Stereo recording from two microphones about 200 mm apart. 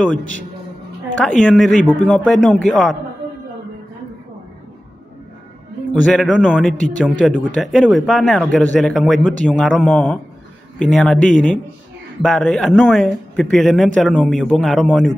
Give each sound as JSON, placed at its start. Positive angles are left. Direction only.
{"t": 1.4, "sound": "speech", "side_deg": 0}
{"t": 5.9, "sound": "speech", "side_deg": 5}